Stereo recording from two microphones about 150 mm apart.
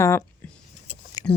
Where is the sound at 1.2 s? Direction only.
25° left (ahead or behind).